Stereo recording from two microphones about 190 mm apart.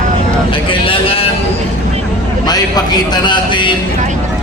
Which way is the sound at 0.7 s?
30° left (ahead or behind).